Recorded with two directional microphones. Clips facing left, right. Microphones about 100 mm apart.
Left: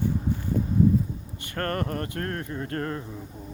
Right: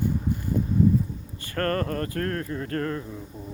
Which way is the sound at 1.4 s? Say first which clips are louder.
Right 3 dB; 20° left (ahead or behind).